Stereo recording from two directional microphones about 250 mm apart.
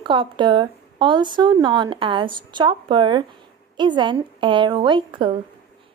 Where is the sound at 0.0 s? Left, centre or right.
Centre.